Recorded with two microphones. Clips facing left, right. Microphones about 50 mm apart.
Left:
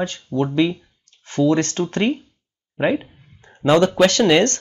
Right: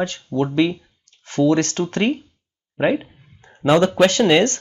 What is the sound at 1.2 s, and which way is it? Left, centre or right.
Speech, right.